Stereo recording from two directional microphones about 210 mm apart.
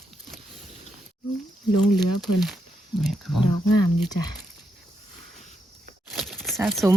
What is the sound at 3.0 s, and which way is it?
Speech, centre (ahead or behind).